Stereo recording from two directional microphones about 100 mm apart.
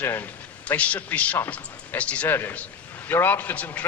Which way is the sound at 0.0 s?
25° left (ahead or behind).